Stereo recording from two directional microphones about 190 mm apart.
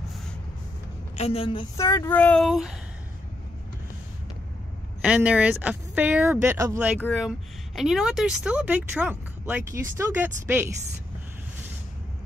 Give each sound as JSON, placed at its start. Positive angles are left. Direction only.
{"t": 1.1, "sound": "a woman's voice", "side_deg": 30}
{"t": 1.8, "sound": "speech", "side_deg": 15}
{"t": 5.0, "sound": "speech", "side_deg": -5}
{"t": 7.0, "sound": "a woman's voice", "side_deg": 0}